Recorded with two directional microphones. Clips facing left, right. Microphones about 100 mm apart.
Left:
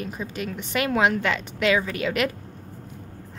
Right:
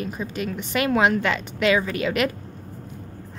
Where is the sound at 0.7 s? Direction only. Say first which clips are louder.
Right 2 dB; 35° right (ahead or behind).